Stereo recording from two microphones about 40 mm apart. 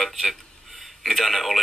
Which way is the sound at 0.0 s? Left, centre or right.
Centre.